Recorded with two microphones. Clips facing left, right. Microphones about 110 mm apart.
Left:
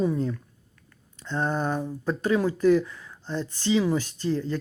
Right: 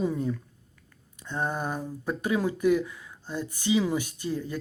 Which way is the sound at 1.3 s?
15° right (ahead or behind).